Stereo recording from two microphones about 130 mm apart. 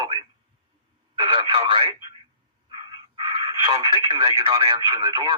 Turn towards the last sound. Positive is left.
turn(degrees=-35)  # may be behind; listen again after turning